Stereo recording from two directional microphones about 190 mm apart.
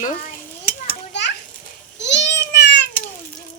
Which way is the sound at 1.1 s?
65° left (ahead or behind).